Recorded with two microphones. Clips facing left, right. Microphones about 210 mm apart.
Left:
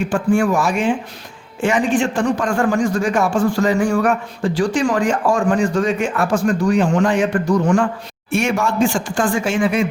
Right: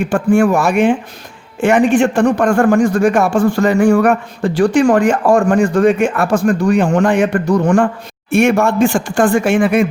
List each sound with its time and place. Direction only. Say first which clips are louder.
0.1 s speech: right 5 dB; 55° right (ahead or behind)
8.3 s speech: right 7 dB; 55° right (ahead or behind)